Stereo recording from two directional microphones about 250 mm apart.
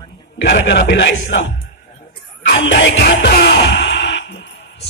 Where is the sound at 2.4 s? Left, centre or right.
Left.